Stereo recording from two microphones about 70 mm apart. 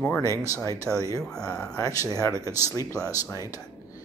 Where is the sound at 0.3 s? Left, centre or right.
Left.